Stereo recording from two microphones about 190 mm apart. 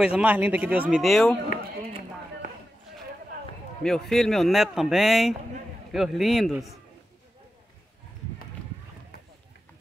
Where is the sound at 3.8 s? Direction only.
5° left (ahead or behind).